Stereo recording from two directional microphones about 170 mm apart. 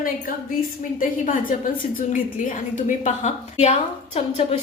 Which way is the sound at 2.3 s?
50° left (ahead or behind).